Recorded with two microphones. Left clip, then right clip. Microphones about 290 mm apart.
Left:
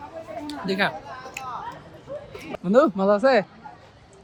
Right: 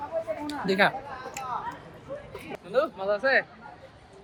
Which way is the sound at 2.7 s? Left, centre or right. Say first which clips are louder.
Left 8 dB; centre.